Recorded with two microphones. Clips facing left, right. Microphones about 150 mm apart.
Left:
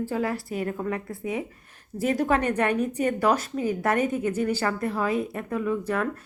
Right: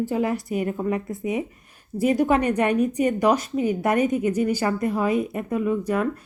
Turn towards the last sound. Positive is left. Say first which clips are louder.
# right 3 dB
turn(degrees=-10)  # may be behind; listen again after turning